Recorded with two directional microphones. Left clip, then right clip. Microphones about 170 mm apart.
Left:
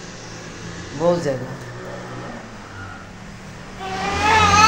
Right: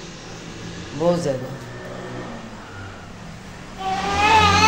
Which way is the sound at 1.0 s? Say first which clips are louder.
Left 1 dB; 10° left (ahead or behind).